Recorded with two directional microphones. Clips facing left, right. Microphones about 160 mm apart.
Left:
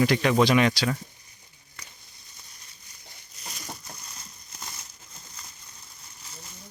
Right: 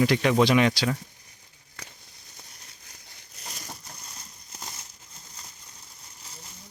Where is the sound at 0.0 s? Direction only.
20° right (ahead or behind).